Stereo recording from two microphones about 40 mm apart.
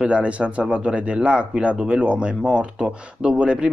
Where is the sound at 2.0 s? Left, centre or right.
Right.